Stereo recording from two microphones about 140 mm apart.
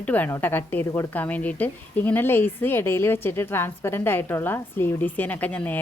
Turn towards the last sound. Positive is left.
turn(degrees=10)  # may be behind; listen again after turning